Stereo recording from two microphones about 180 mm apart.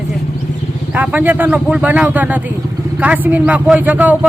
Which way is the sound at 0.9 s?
10° right (ahead or behind).